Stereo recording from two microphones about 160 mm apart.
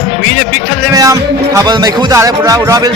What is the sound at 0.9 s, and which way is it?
Speech, 20° right (ahead or behind).